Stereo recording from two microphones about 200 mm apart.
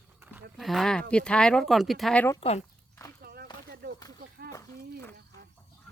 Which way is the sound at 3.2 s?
50° right (ahead or behind).